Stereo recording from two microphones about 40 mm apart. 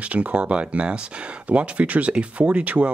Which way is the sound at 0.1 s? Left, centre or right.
Right.